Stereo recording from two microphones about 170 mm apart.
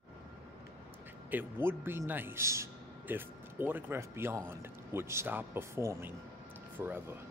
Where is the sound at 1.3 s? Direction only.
15° right (ahead or behind).